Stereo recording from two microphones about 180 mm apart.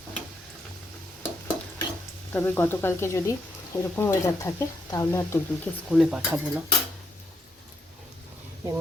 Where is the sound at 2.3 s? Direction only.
10° left (ahead or behind).